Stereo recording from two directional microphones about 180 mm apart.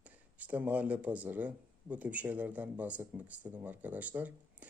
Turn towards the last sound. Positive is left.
turn(degrees=-10)  # may be behind; listen again after turning